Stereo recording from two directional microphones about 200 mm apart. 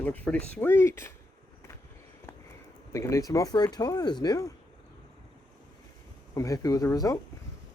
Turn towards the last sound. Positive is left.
turn(degrees=15)  # may be behind; listen again after turning